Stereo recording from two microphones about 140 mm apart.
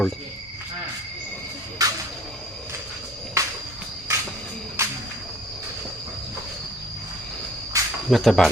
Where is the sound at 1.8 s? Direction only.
25° right (ahead or behind).